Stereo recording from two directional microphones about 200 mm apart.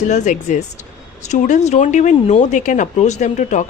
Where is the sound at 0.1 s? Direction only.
40° left (ahead or behind).